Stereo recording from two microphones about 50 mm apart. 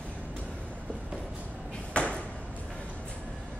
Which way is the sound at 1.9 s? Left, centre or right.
Left.